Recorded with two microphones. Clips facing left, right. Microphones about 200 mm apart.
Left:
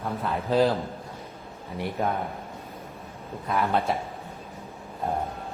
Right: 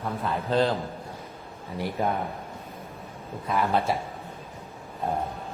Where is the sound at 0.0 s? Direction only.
Centre (ahead or behind).